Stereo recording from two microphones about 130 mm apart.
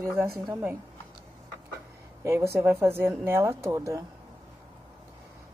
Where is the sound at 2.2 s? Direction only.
20° right (ahead or behind).